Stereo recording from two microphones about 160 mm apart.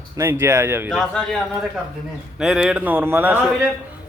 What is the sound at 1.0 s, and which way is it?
Speech, 5° left (ahead or behind).